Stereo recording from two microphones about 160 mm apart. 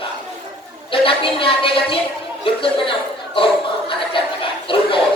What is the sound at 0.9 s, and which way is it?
Speech, 35° left (ahead or behind).